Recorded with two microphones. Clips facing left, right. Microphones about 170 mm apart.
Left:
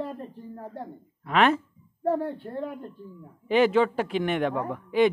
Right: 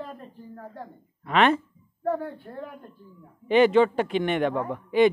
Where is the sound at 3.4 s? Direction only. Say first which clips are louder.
Right 3 dB; centre (ahead or behind).